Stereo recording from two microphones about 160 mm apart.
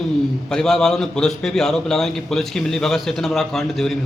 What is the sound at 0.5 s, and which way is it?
A man's voice, 5° left (ahead or behind).